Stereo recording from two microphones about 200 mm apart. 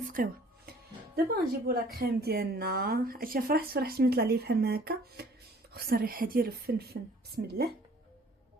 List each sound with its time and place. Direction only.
0.0 s music: 45° right (ahead or behind)
1.1 s a woman's voice: 50° right (ahead or behind)